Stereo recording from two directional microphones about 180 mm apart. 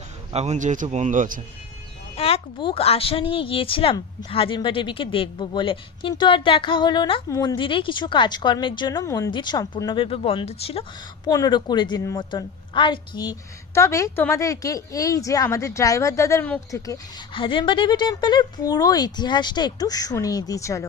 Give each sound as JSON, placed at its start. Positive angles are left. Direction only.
{"t": 0.3, "sound": "speech", "side_deg": -40}
{"t": 2.1, "sound": "speech", "side_deg": 35}
{"t": 11.3, "sound": "speech", "side_deg": 20}